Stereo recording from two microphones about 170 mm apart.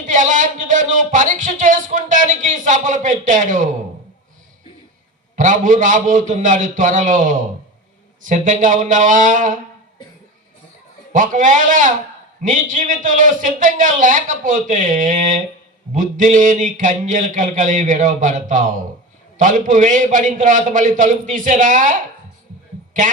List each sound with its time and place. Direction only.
0.0 s speech: 50° right (ahead or behind)
5.4 s speech: 50° right (ahead or behind)
11.1 s speech: 50° right (ahead or behind)